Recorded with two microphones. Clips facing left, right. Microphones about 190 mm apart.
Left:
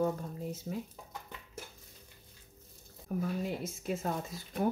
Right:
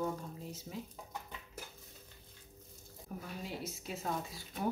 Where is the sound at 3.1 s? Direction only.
60° left (ahead or behind).